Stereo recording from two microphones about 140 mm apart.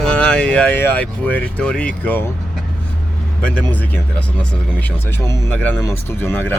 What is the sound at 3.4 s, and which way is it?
Speech, 10° left (ahead or behind).